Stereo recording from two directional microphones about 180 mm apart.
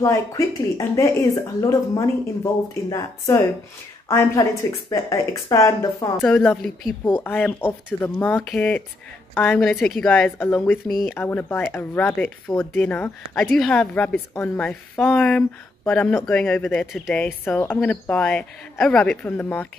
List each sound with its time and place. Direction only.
0.0 s speech: 15° left (ahead or behind)
6.2 s a woman's voice: 5° left (ahead or behind)